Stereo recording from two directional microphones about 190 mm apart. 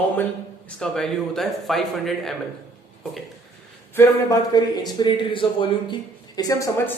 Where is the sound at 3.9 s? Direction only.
15° left (ahead or behind).